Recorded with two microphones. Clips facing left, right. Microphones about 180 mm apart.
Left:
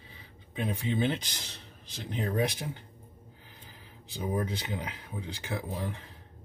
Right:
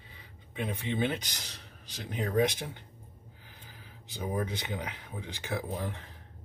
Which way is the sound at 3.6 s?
30° left (ahead or behind).